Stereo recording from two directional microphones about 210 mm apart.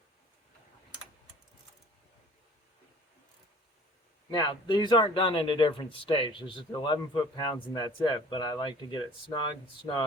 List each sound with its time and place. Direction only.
4.3 s a man's voice: 20° left (ahead or behind)